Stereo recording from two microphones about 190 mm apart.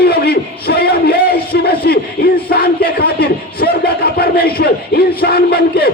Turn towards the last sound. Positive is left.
turn(degrees=55)  # may be behind; listen again after turning